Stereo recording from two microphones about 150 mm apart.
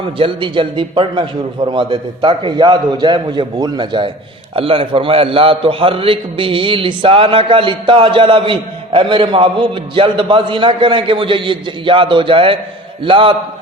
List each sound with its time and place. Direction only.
0.0 s a man's voice: 35° right (ahead or behind)